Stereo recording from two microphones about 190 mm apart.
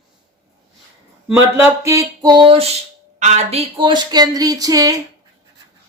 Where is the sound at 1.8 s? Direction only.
20° right (ahead or behind).